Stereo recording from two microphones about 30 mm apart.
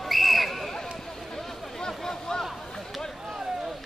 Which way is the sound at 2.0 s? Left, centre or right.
Left.